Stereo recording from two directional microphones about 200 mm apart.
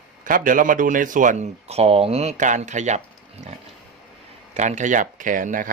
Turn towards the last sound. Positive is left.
turn(degrees=-45)  # may be behind; listen again after turning